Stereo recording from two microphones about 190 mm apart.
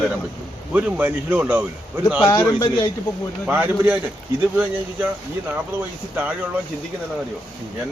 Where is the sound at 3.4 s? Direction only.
10° right (ahead or behind).